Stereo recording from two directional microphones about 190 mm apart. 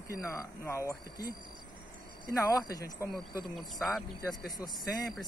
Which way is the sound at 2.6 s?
20° left (ahead or behind).